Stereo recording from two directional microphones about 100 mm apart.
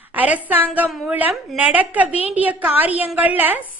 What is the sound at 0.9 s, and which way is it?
Speech, centre (ahead or behind).